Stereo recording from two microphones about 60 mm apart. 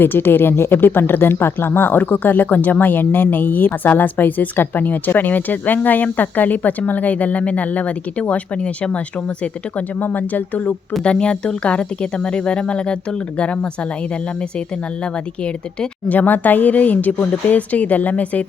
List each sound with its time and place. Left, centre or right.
0.0 s speech: left
11.0 s speech: centre
16.0 s speech: left